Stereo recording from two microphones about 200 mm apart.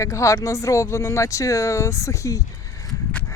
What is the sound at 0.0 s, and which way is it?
Speech, 15° left (ahead or behind).